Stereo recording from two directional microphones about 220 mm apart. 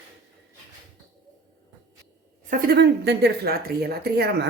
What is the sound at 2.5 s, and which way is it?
Speech, 45° right (ahead or behind).